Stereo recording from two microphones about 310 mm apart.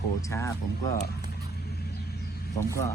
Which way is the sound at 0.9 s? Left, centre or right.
Left.